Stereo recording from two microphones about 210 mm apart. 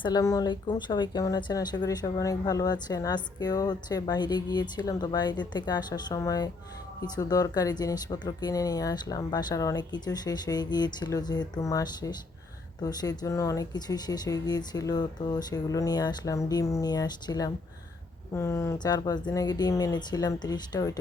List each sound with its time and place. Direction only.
0.0 s speech: 20° left (ahead or behind)